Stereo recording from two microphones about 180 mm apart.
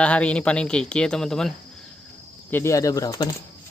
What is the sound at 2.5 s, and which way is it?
Speech, 15° left (ahead or behind).